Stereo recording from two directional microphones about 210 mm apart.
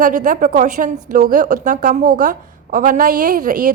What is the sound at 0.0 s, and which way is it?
A woman's voice, 40° right (ahead or behind).